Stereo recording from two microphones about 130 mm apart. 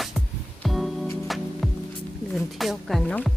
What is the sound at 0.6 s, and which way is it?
Music, centre (ahead or behind).